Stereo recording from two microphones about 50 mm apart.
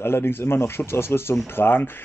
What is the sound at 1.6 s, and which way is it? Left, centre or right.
Speech, left.